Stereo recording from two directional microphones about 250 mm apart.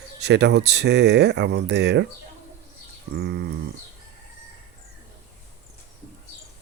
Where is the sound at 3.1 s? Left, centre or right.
Right.